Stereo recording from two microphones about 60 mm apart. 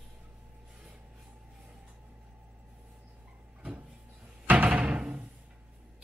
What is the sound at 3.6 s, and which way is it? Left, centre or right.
Music, right.